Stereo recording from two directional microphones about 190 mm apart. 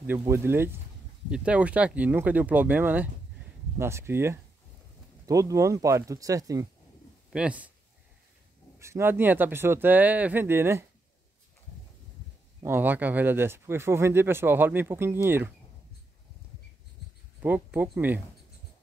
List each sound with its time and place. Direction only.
0.0 s speech: 10° right (ahead or behind)
7.3 s speech: 5° right (ahead or behind)
8.7 s speech: 15° right (ahead or behind)
12.6 s speech: 10° right (ahead or behind)
17.4 s speech: 10° right (ahead or behind)